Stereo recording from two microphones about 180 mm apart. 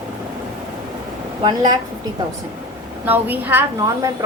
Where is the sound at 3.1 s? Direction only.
10° right (ahead or behind).